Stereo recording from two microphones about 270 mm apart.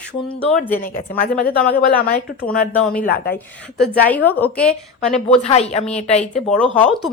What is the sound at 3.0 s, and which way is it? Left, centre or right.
Speech, left.